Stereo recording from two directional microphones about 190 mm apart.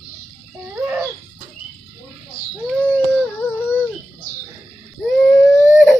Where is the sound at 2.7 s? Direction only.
5° left (ahead or behind).